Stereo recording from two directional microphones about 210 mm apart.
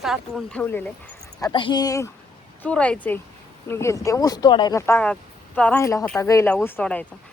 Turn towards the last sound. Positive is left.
turn(degrees=5)  # may be behind; listen again after turning